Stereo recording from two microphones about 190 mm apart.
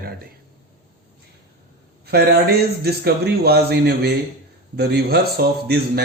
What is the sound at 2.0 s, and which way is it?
Speech, 60° right (ahead or behind).